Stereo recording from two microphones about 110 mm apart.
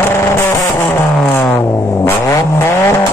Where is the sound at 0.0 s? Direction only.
25° left (ahead or behind).